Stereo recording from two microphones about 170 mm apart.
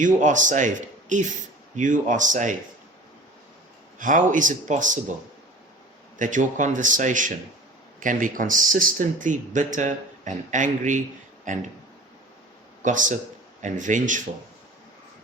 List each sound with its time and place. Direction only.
0.0 s speech: 50° right (ahead or behind)
3.9 s speech: 50° right (ahead or behind)
6.1 s speech: 50° right (ahead or behind)
12.8 s speech: 50° right (ahead or behind)